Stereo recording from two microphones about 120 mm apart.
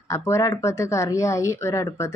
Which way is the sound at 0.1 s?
25° left (ahead or behind).